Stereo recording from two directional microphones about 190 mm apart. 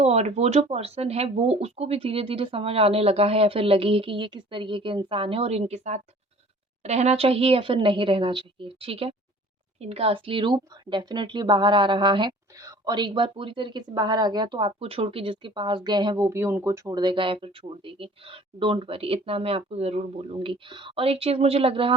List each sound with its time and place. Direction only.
0.0 s a woman's voice: 35° right (ahead or behind)